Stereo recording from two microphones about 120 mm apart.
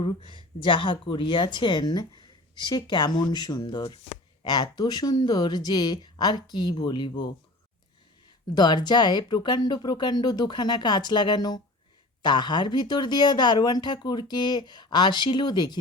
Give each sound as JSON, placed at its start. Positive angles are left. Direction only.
{"t": 0.0, "sound": "speech", "side_deg": 45}
{"t": 8.5, "sound": "speech", "side_deg": 35}